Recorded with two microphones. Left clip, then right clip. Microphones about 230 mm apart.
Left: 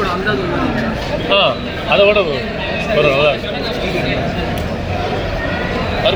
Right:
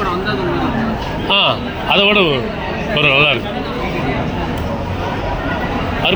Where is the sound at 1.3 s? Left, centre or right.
Right.